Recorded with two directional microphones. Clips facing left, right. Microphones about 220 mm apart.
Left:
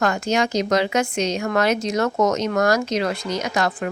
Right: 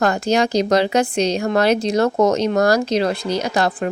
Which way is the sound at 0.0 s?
35° right (ahead or behind).